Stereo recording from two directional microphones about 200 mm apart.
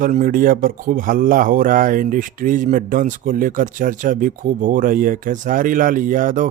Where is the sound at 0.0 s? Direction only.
40° right (ahead or behind).